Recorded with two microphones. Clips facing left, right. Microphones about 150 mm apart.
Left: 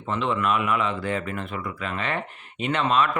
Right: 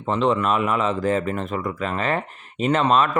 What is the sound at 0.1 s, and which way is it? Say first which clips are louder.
Speech: right 4 dB; 35° right (ahead or behind).